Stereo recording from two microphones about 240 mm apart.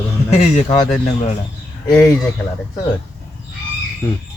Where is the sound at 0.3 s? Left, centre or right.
Left.